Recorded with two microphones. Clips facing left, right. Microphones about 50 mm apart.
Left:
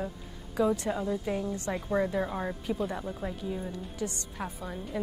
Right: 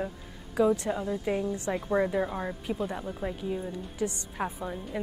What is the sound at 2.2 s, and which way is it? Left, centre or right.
A woman's voice, centre.